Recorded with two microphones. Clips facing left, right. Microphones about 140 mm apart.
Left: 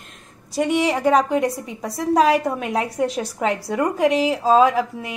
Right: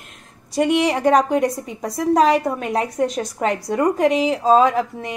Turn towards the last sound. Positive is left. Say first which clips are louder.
# even
turn(degrees=5)  # may be behind; listen again after turning